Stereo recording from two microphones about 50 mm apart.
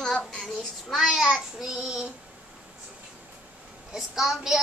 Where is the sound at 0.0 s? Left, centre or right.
Centre.